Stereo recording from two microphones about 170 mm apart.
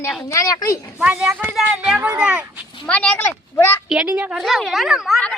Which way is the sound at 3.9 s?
5° right (ahead or behind).